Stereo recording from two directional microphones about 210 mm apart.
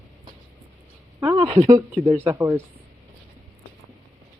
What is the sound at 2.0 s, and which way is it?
Speech, 15° right (ahead or behind).